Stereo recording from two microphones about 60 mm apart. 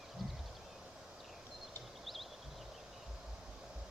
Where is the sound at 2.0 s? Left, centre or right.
Centre.